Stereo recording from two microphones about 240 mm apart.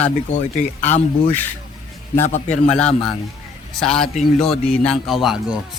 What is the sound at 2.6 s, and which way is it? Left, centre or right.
A man's voice, centre.